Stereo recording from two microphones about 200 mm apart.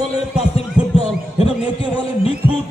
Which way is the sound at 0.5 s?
30° left (ahead or behind).